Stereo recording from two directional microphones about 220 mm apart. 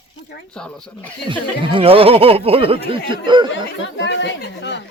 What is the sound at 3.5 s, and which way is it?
Speech, 55° left (ahead or behind).